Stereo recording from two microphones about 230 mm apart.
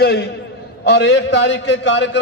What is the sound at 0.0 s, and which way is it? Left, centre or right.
A man's voice, left.